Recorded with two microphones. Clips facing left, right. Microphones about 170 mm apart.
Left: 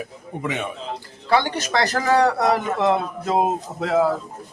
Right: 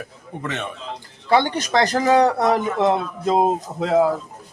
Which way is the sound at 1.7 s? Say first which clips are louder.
Right 3 dB; 20° right (ahead or behind).